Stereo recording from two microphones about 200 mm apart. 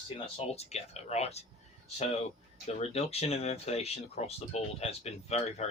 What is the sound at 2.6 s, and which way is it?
Speech, 30° left (ahead or behind).